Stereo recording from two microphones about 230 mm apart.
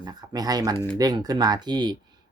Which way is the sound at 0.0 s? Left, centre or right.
Centre.